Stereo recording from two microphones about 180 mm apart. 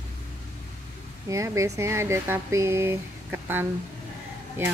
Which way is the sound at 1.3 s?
15° right (ahead or behind).